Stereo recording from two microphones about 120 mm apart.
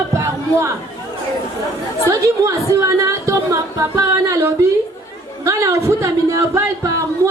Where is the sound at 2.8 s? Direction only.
25° right (ahead or behind).